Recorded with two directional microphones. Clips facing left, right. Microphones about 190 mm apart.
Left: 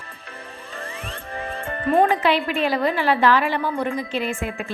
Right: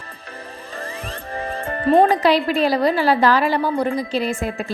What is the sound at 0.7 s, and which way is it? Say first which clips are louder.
Speech: right 3 dB; 35° right (ahead or behind).